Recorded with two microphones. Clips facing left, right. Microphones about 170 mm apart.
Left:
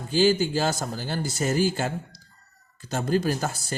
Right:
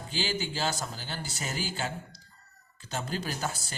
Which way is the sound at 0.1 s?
45° left (ahead or behind).